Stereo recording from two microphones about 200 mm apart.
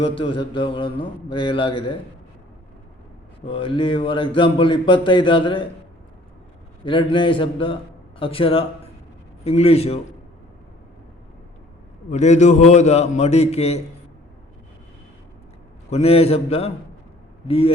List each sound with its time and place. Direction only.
0.0 s speech: 25° left (ahead or behind)
3.4 s speech: 25° left (ahead or behind)
6.8 s a man's voice: 25° left (ahead or behind)
12.1 s a man's voice: 35° left (ahead or behind)
15.9 s a man's voice: 30° left (ahead or behind)